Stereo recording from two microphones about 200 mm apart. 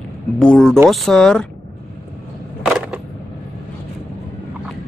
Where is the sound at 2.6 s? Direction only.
5° right (ahead or behind).